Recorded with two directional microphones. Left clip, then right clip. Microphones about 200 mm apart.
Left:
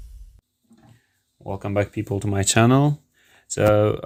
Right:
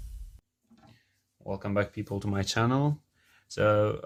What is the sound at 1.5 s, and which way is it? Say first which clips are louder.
Speech: left 6 dB; 40° left (ahead or behind).